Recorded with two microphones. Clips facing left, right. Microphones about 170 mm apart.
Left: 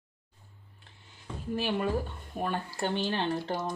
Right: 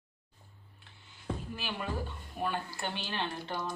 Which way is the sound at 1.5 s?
40° left (ahead or behind).